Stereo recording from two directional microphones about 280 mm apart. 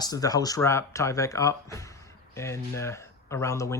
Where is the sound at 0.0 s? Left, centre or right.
Centre.